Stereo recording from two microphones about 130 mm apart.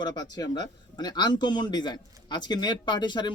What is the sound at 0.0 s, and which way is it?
Speech, 30° left (ahead or behind).